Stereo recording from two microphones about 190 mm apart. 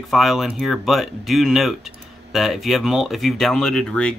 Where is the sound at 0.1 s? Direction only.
Centre (ahead or behind).